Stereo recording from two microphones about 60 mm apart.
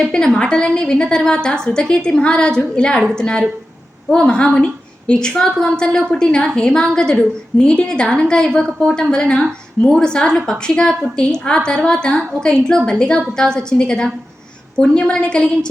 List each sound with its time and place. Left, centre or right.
0.0 s a woman's voice: centre